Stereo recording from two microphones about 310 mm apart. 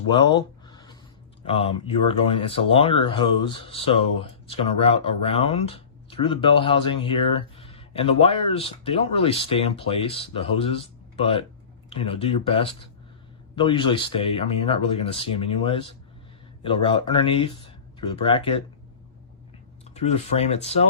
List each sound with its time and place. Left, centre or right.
0.1 s a sound: centre
1.5 s speech: centre
19.8 s speech: centre